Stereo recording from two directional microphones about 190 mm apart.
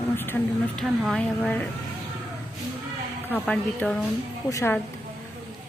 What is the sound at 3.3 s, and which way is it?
Speech, 5° left (ahead or behind).